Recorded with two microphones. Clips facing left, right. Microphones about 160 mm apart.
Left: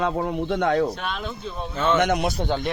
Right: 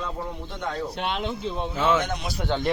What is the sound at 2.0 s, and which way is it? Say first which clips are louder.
Speech: left 9 dB; 70° left (ahead or behind).